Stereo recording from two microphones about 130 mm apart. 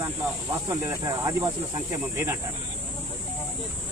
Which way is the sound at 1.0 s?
30° right (ahead or behind).